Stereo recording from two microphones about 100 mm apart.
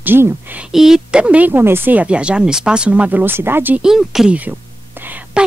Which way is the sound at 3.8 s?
5° right (ahead or behind).